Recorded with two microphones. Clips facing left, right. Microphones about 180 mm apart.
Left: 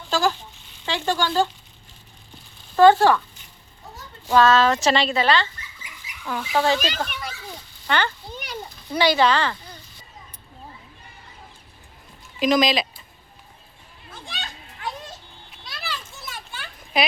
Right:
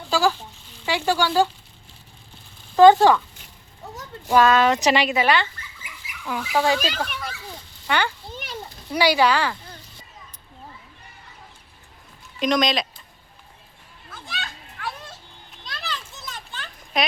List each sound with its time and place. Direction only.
0.1 s speech: 10° right (ahead or behind)
2.7 s speech: 15° right (ahead or behind)
4.3 s speech: 15° right (ahead or behind)
6.2 s speech: 5° right (ahead or behind)
12.4 s speech: centre (ahead or behind)
14.1 s children playing: 20° left (ahead or behind)
15.6 s children playing: 5° left (ahead or behind)